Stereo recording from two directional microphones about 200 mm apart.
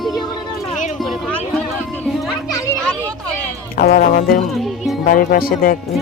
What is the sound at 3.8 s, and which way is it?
Speech, 45° left (ahead or behind).